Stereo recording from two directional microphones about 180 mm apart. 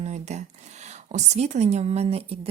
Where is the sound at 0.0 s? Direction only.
40° right (ahead or behind).